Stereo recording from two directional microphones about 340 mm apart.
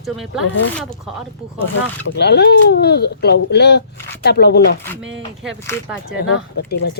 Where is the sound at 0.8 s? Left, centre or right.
Centre.